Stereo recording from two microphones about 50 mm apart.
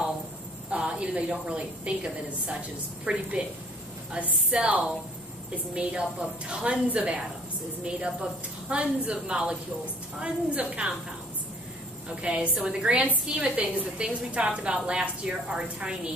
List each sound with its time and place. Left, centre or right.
0.8 s a woman's voice: right
3.1 s a woman's voice: right
4.5 s a woman's voice: right
12.2 s a woman's voice: right